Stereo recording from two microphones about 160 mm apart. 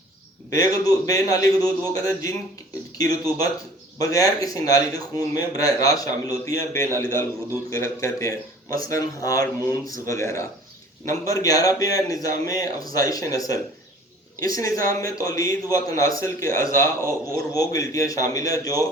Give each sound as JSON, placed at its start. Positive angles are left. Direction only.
{"t": 0.5, "sound": "a man's voice", "side_deg": 20}